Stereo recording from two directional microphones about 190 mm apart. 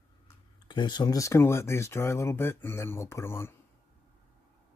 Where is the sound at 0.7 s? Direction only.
25° left (ahead or behind).